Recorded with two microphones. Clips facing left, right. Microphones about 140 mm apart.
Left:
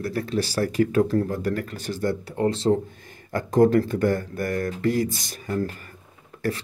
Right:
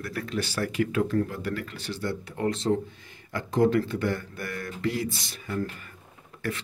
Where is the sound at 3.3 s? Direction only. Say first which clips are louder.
Left 5 dB; 45° left (ahead or behind).